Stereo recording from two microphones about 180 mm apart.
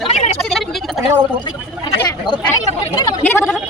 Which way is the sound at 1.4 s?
30° left (ahead or behind).